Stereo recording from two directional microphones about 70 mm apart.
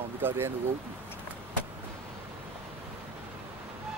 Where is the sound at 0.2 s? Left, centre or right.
Right.